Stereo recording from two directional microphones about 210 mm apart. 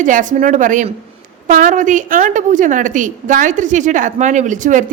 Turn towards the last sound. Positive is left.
turn(degrees=-40)  # may be behind; listen again after turning